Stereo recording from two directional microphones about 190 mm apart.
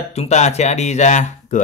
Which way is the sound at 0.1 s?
35° left (ahead or behind).